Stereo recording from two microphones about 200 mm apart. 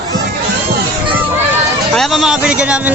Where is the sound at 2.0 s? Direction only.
Centre (ahead or behind).